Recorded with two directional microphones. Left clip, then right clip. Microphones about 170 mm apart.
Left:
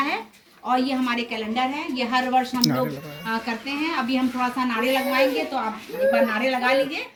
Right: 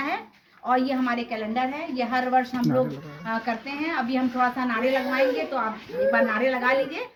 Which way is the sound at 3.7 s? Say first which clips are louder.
Left 6 dB; 15° right (ahead or behind).